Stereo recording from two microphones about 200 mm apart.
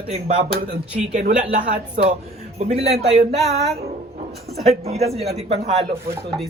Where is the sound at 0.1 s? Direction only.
30° right (ahead or behind).